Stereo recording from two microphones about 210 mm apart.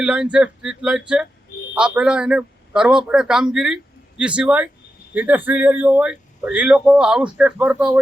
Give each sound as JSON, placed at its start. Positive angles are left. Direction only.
{"t": 0.0, "sound": "speech", "side_deg": -5}